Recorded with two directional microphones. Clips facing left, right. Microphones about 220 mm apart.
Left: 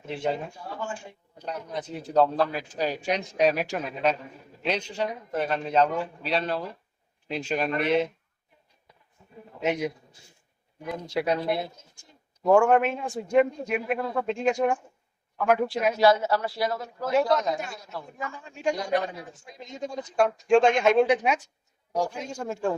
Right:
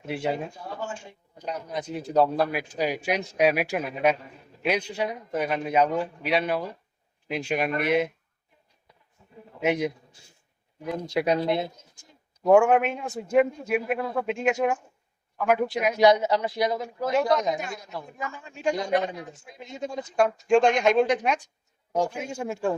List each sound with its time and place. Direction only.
0.1 s a man's voice: 10° right (ahead or behind)
1.4 s a man's voice: 10° right (ahead or behind)
9.6 s a man's voice: 15° right (ahead or behind)
11.1 s speech: 15° right (ahead or behind)
12.5 s a man's voice: 10° right (ahead or behind)
16.0 s a man's voice: 15° right (ahead or behind)
17.1 s a man's voice: centre (ahead or behind)
22.2 s a man's voice: 10° right (ahead or behind)